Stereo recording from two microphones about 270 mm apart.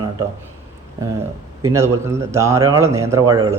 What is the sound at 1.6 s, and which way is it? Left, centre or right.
A man's voice, centre.